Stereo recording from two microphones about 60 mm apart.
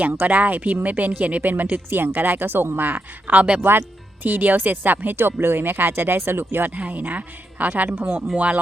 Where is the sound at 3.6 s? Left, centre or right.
Right.